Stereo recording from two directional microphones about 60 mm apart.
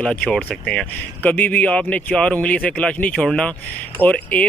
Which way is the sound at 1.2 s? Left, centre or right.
Left.